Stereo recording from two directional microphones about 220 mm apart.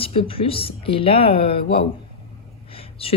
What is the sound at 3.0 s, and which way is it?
Speech, 25° left (ahead or behind).